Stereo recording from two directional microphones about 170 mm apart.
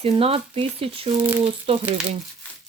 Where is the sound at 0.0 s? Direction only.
35° right (ahead or behind).